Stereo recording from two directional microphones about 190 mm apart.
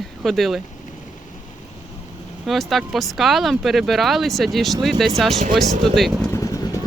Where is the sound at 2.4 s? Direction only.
Centre (ahead or behind).